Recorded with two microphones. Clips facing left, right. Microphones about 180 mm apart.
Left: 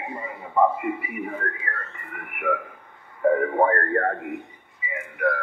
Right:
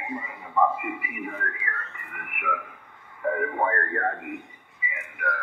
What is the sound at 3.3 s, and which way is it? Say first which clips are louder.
Speech: left 5 dB; 40° left (ahead or behind).